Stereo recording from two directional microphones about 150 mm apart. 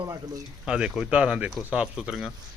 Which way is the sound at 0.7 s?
5° right (ahead or behind).